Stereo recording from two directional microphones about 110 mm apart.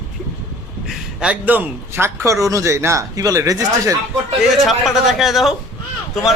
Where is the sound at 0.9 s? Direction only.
10° right (ahead or behind); by 3.9 s 35° right (ahead or behind).